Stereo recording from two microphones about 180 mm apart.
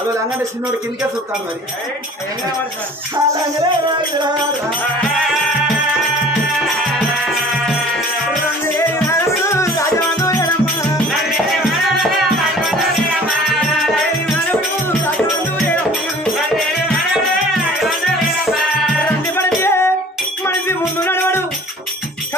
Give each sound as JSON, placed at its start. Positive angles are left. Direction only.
{"t": 9.5, "sound": "music", "side_deg": 15}
{"t": 11.2, "sound": "music", "side_deg": 0}
{"t": 19.3, "sound": "music", "side_deg": 15}
{"t": 21.0, "sound": "music", "side_deg": 15}